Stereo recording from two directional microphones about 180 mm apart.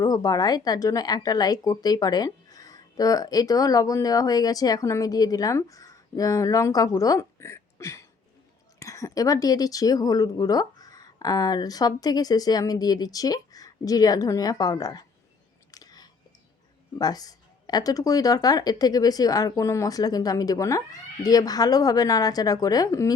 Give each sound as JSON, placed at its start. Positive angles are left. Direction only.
{"t": 0.0, "sound": "speech", "side_deg": 20}
{"t": 15.7, "sound": "whispering", "side_deg": 20}
{"t": 17.0, "sound": "speech", "side_deg": 20}